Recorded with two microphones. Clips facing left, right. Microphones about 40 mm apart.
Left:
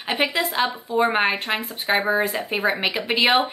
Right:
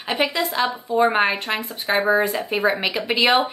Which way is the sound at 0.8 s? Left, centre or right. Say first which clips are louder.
Right 3 dB; centre.